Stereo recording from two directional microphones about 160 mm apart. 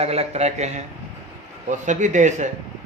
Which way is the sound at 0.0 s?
40° right (ahead or behind).